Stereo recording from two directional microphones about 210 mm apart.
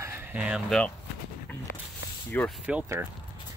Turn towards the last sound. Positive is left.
turn(degrees=-10)  # may be behind; listen again after turning